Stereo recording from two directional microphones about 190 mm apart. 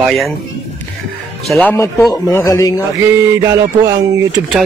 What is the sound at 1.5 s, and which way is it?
Speech, 10° left (ahead or behind).